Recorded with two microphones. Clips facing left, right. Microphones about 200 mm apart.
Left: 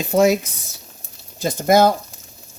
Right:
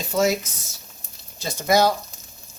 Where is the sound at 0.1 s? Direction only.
55° left (ahead or behind).